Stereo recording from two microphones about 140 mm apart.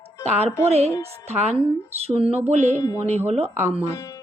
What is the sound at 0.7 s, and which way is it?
A woman's voice, 50° right (ahead or behind).